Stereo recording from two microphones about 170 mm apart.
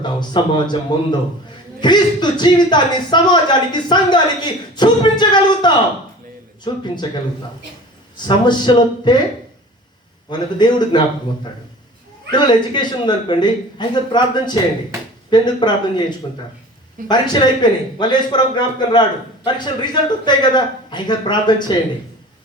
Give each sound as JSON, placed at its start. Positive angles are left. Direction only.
{"t": 0.0, "sound": "speech", "side_deg": 25}
{"t": 10.2, "sound": "speech", "side_deg": 25}
{"t": 12.3, "sound": "speech", "side_deg": 25}